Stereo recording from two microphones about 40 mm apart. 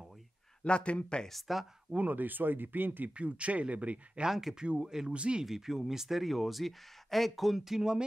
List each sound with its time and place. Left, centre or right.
0.7 s speech: left
1.3 s speech: centre
2.0 s speech: right
3.2 s speech: right
4.3 s speech: centre
4.6 s speech: right
5.4 s speech: centre